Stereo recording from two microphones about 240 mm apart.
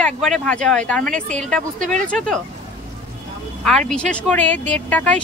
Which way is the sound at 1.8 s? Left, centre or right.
Right.